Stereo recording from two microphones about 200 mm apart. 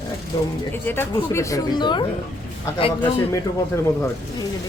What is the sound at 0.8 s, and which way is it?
Speech, 10° left (ahead or behind).